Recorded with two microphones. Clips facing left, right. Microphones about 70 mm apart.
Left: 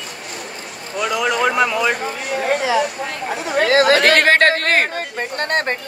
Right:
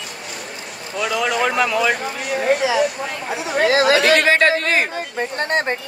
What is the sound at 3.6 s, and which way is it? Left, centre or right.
Speech, left.